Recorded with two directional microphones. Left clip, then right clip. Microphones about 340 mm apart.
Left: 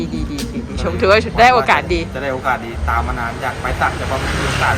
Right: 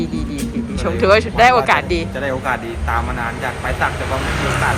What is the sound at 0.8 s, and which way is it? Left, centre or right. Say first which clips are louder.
Speech: even; centre.